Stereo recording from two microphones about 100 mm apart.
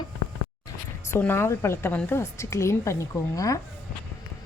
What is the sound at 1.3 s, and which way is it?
A woman's voice, 25° left (ahead or behind).